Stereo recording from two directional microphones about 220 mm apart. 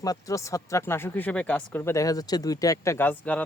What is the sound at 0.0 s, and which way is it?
Speech, 15° left (ahead or behind).